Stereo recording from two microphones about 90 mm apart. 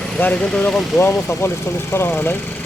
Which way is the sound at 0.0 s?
15° left (ahead or behind).